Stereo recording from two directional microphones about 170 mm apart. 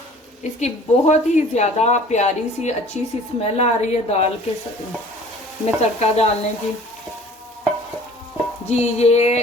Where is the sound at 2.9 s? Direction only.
40° left (ahead or behind).